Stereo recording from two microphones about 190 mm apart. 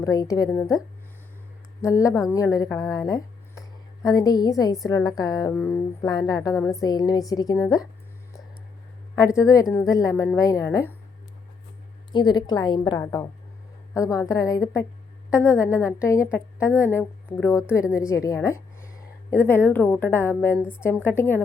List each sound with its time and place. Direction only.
0.0 s a woman's voice: 20° left (ahead or behind)
1.8 s a woman's voice: 15° left (ahead or behind)
9.1 s a woman's voice: 15° left (ahead or behind)
12.1 s a woman's voice: 20° left (ahead or behind)